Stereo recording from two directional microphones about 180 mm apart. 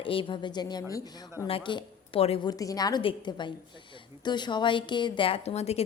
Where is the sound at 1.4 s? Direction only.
30° left (ahead or behind).